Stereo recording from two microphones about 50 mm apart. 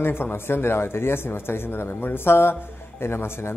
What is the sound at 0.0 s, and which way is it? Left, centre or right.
Speech, left.